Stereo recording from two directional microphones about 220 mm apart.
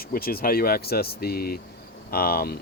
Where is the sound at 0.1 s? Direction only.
45° left (ahead or behind).